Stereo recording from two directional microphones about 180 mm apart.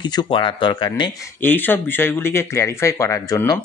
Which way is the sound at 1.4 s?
10° left (ahead or behind).